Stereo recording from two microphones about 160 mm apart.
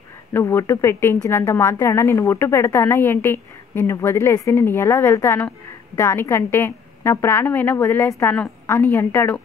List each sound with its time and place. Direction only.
0.3 s a woman's voice: 15° left (ahead or behind)